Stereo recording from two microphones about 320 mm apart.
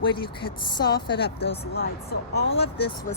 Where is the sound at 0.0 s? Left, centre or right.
Centre.